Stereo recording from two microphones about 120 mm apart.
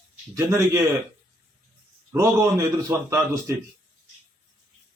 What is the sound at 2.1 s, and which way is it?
A man's voice, 25° right (ahead or behind).